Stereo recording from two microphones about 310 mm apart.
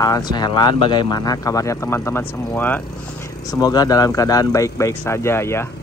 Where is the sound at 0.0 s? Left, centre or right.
Centre.